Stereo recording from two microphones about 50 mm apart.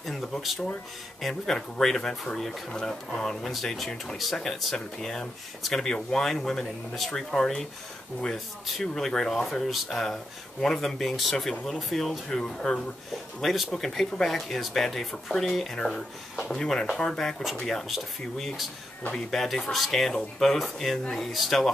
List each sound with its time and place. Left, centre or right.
0.0 s speech: centre
0.4 s speech: centre
9.0 s speech: centre
17.8 s speech: centre